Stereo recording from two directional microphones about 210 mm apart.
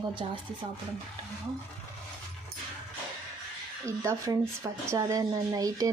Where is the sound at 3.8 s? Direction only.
15° right (ahead or behind).